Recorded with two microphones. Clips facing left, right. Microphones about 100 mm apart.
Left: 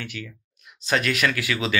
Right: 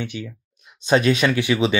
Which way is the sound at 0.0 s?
25° right (ahead or behind).